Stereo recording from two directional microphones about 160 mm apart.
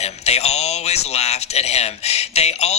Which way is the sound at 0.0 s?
40° left (ahead or behind).